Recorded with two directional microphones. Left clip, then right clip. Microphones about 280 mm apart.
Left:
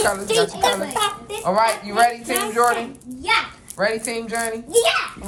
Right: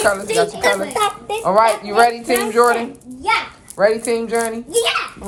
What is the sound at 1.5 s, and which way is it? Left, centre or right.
Speech, centre.